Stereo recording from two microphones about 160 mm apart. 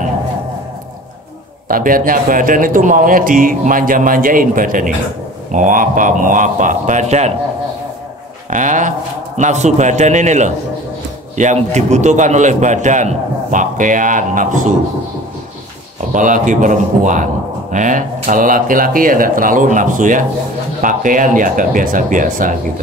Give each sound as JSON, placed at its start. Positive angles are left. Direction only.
{"t": 1.7, "sound": "a man's voice", "side_deg": -60}
{"t": 8.5, "sound": "a man's voice", "side_deg": -50}
{"t": 16.1, "sound": "a man's voice", "side_deg": -55}